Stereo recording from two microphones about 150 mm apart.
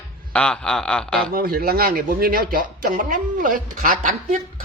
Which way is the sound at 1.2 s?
80° right.